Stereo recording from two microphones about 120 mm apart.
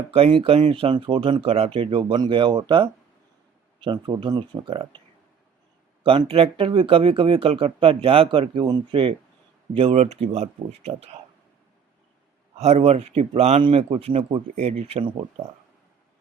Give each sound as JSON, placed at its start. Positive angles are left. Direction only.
{"t": 0.1, "sound": "speech", "side_deg": -50}
{"t": 9.7, "sound": "speech", "side_deg": -60}
{"t": 12.5, "sound": "speech", "side_deg": -65}
{"t": 13.6, "sound": "speech", "side_deg": -50}
{"t": 14.5, "sound": "speech", "side_deg": -70}